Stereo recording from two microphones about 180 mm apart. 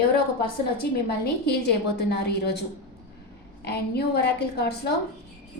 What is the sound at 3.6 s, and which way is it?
A woman's voice, 65° left (ahead or behind).